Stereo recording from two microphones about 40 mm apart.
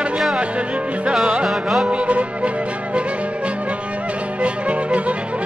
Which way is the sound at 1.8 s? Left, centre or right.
Right.